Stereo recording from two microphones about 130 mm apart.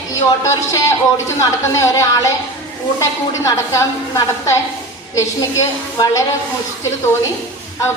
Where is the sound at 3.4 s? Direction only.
25° left (ahead or behind).